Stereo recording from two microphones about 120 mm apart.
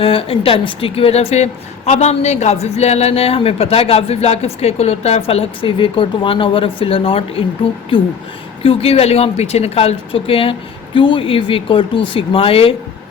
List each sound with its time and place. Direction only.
0.0 s a woman's voice: 50° left (ahead or behind)
8.6 s a woman's voice: 55° left (ahead or behind)